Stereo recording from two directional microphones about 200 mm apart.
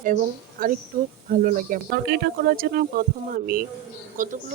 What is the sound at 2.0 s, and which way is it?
Speech, 55° right (ahead or behind).